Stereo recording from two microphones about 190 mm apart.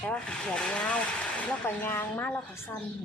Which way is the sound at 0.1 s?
5° left (ahead or behind).